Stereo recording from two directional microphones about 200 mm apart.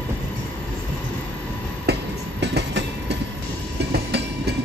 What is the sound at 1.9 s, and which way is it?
Train, 55° right (ahead or behind).